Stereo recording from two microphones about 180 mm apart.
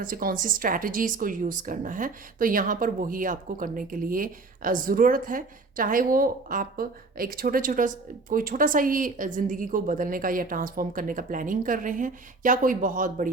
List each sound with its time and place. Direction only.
0.0 s a woman's voice: 50° right (ahead or behind)